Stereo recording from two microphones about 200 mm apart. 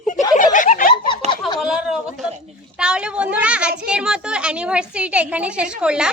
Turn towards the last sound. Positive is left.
turn(degrees=-5)  # may be behind; listen again after turning